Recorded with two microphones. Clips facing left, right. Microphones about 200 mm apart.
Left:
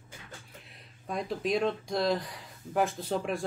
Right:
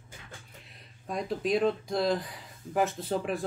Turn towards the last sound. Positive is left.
turn(degrees=0)  # may be behind; listen again after turning